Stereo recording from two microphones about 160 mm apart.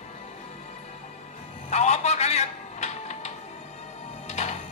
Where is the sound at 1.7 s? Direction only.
45° left (ahead or behind).